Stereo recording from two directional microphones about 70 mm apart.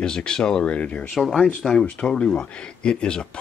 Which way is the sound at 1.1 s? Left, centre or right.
Centre.